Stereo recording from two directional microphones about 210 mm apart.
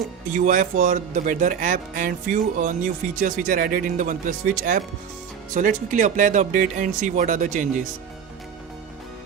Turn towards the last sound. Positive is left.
turn(degrees=-35)  # may be behind; listen again after turning